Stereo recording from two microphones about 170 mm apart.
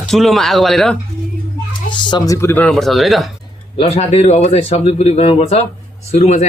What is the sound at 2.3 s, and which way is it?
Speech, 10° left (ahead or behind).